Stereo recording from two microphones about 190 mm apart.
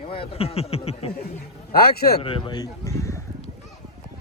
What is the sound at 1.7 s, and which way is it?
Speech, 55° left (ahead or behind).